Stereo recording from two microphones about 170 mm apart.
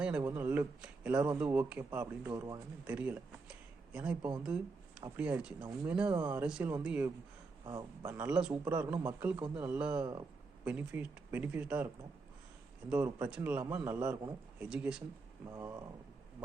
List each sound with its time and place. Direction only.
0.3 s speech: 10° right (ahead or behind)
2.3 s speech: 25° right (ahead or behind)
2.8 s speech: 10° right (ahead or behind)
4.4 s a sound: 5° right (ahead or behind)
5.0 s speech: 10° right (ahead or behind)
7.6 s a man's voice: 25° right (ahead or behind)
8.0 s speech: 10° right (ahead or behind)
10.0 s a sound: 25° right (ahead or behind)
10.7 s speech: 10° right (ahead or behind)
12.9 s speech: 5° right (ahead or behind)
15.5 s speech: 20° right (ahead or behind)